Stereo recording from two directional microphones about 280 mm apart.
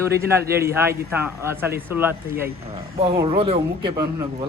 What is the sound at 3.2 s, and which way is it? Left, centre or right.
Speech, centre.